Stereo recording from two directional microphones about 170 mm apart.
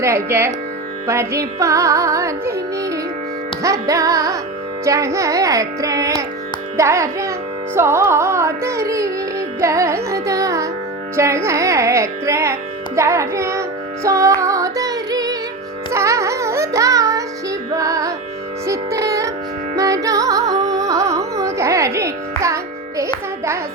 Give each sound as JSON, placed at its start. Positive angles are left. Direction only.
{"t": 0.0, "sound": "music", "side_deg": -15}